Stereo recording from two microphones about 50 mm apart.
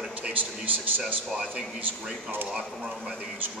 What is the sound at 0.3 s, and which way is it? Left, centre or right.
Speech, right.